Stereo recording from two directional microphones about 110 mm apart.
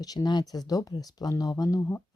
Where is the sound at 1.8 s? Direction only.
20° left (ahead or behind).